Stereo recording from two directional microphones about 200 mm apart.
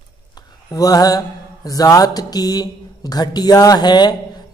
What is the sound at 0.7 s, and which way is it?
Mantra, 20° left (ahead or behind).